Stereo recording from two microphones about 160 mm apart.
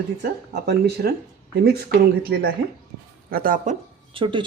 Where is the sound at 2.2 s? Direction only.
75° right (ahead or behind).